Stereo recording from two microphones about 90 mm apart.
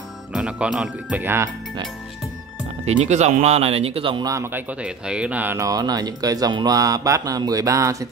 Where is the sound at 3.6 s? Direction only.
90° right.